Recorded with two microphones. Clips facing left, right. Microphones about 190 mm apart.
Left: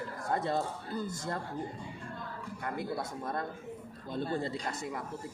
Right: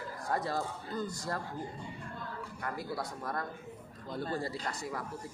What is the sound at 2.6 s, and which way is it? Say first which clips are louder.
Speech: left 2 dB; 25° left (ahead or behind).